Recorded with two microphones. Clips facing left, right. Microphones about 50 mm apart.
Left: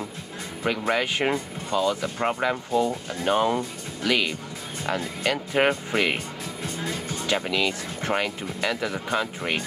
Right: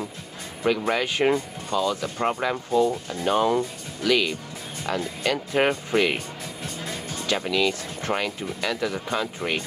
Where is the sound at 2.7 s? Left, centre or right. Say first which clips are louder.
Right 2 dB; left.